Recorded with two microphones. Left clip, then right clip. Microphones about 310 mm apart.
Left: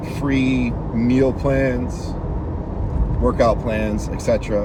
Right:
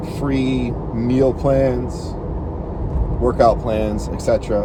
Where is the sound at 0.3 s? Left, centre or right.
Centre.